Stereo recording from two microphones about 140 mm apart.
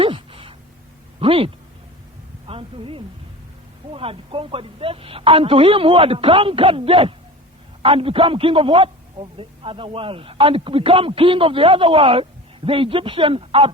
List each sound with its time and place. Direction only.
0.0 s a sound: 40° right (ahead or behind)
1.2 s a man's voice: 40° right (ahead or behind)
2.5 s a man's voice: 40° right (ahead or behind)